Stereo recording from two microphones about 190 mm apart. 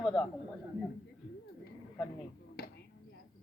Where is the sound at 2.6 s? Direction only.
55° left (ahead or behind).